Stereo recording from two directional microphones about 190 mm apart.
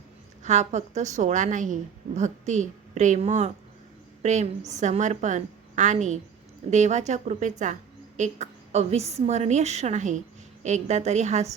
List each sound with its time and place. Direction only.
0.4 s a woman's voice: 35° right (ahead or behind)